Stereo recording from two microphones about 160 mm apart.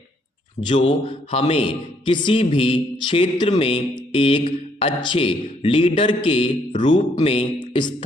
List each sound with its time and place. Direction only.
0.7 s a man's voice: 35° left (ahead or behind)
7.7 s music: 30° left (ahead or behind)